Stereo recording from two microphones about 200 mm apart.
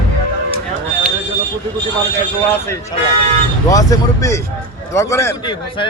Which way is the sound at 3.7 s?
15° left (ahead or behind).